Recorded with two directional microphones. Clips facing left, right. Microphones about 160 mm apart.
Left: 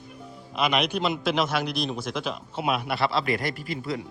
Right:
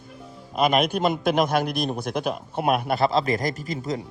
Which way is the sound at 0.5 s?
45° right (ahead or behind).